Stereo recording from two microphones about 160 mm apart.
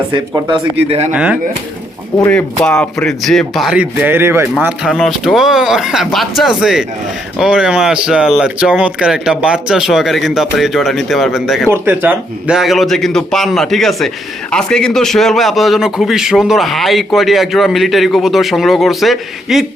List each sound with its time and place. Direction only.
0.9 s speech: 40° right (ahead or behind)
1.1 s speech: 10° right (ahead or behind)
2.3 s a man's voice: 5° left (ahead or behind); by 4.4 s 15° right (ahead or behind)
4.6 s a man's voice: 5° right (ahead or behind)
11.7 s a man's voice: 10° right (ahead or behind)